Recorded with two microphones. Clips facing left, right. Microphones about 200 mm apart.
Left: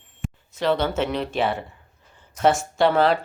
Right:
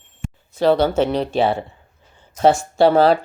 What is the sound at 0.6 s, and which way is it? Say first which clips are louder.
Speech: right 6 dB; 35° right (ahead or behind).